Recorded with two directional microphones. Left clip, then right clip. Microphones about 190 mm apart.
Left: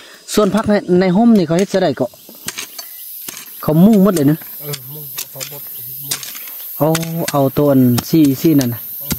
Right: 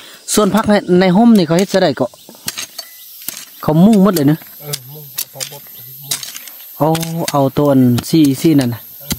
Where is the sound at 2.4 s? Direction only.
25° right (ahead or behind).